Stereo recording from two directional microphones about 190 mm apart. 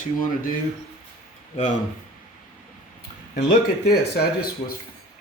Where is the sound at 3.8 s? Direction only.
55° left (ahead or behind).